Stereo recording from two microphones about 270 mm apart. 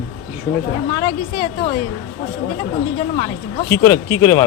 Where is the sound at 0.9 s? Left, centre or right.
Centre.